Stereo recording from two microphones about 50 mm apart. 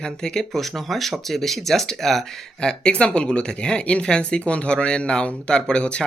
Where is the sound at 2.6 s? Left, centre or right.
Centre.